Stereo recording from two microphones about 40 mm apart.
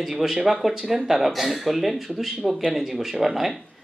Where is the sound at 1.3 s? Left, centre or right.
Centre.